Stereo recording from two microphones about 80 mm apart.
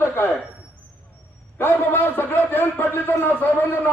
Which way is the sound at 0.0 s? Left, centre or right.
Left.